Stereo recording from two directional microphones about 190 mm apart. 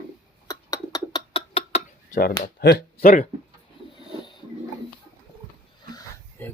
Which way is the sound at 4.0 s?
25° left (ahead or behind).